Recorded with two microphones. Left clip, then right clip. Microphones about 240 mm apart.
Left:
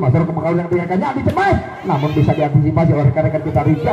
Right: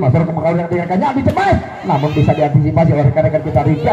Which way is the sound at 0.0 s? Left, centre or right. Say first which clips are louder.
Right 3 dB; right.